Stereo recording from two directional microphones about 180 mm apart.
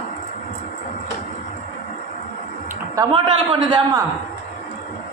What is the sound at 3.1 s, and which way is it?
Speech, 25° right (ahead or behind).